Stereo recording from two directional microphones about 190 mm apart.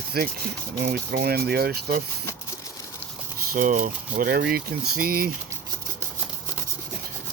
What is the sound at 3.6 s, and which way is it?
Speech, 45° right (ahead or behind).